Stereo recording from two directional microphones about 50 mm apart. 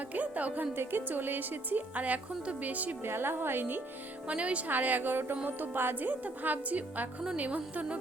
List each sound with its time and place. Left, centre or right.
0.1 s a woman's voice: right
0.8 s a woman's voice: right
3.0 s speech: right
4.3 s a woman's voice: right